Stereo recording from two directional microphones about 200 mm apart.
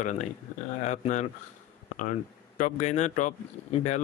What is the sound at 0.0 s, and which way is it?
Speech, 35° left (ahead or behind).